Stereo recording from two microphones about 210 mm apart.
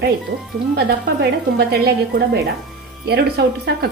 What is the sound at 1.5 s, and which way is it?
A woman's voice, 50° right (ahead or behind).